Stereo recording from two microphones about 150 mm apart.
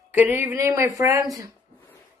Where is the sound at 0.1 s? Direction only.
10° right (ahead or behind).